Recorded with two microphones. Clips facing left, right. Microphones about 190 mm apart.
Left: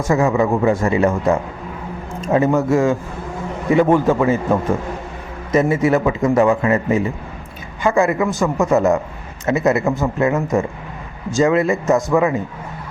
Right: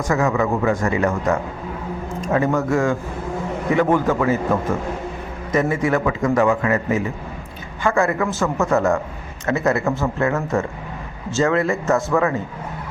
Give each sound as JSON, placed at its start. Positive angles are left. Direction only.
{"t": 0.1, "sound": "a man's voice", "side_deg": 25}
{"t": 5.5, "sound": "a man's voice", "side_deg": 25}